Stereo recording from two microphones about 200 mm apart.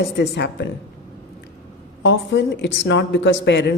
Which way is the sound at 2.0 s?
65° left (ahead or behind).